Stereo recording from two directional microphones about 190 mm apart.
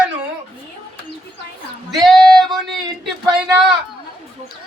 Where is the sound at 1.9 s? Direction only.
Centre (ahead or behind).